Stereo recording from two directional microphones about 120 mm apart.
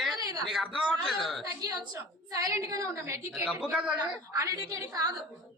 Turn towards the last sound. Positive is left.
turn(degrees=-30)  # may be behind; listen again after turning